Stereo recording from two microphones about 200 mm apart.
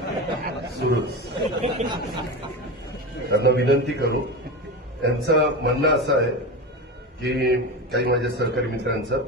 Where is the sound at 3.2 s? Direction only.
60° right (ahead or behind).